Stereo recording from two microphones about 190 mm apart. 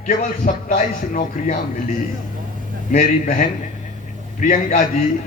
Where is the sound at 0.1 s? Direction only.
40° left (ahead or behind).